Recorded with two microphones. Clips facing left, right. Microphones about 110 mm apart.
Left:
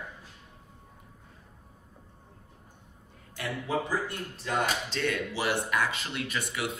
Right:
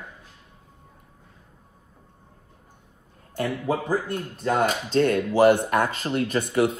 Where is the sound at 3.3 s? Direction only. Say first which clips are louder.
Right 6 dB; 45° right (ahead or behind).